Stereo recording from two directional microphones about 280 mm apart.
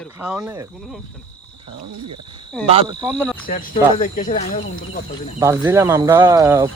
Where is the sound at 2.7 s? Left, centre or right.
Centre.